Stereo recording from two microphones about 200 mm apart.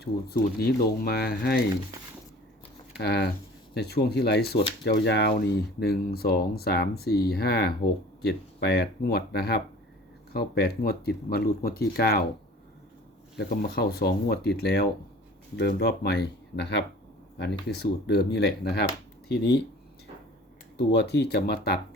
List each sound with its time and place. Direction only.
0.0 s speech: 50° left (ahead or behind)
3.0 s speech: 55° left (ahead or behind)
13.3 s speech: 50° left (ahead or behind)
20.7 s speech: 55° left (ahead or behind)